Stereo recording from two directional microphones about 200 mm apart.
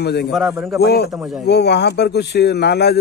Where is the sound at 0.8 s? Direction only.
55° left (ahead or behind).